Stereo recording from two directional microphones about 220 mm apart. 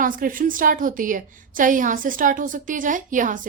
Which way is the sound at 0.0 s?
40° right (ahead or behind).